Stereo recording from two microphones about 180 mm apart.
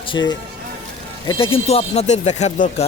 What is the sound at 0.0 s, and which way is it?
Speech, 25° left (ahead or behind).